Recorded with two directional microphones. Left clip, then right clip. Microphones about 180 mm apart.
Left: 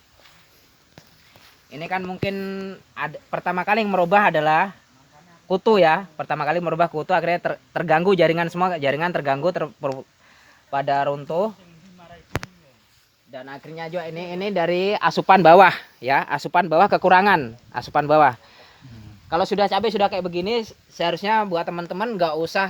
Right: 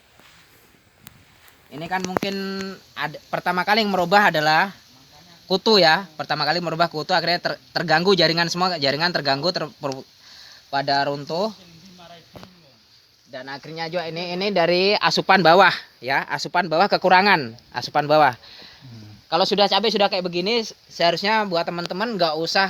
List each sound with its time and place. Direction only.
1.7 s speech: 15° left (ahead or behind); by 11.5 s 35° left (ahead or behind)
13.3 s speech: centre (ahead or behind); by 22.6 s 20° left (ahead or behind)